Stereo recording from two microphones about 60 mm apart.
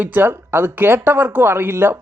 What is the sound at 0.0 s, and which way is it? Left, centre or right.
Speech, right.